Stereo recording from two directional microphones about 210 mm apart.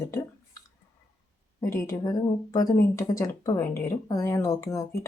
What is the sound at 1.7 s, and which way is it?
Speech, 15° left (ahead or behind).